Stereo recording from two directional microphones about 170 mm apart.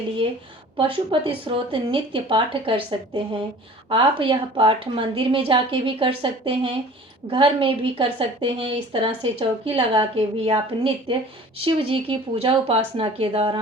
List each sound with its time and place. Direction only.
0.8 s a woman's voice: 30° right (ahead or behind)
3.8 s a woman's voice: 30° right (ahead or behind)